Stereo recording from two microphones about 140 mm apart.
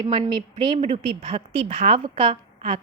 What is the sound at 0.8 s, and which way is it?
Speech, 45° right (ahead or behind).